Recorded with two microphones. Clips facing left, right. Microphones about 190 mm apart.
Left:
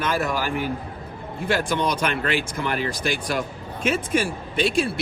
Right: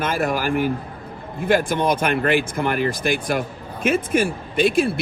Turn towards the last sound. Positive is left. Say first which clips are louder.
# right 4 dB
turn(degrees=-55)  # may be behind; listen again after turning